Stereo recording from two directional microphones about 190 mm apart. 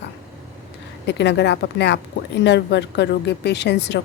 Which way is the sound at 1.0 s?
65° left (ahead or behind).